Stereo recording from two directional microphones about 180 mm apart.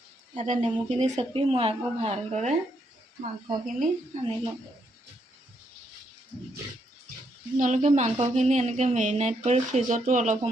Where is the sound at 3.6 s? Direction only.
45° right (ahead or behind).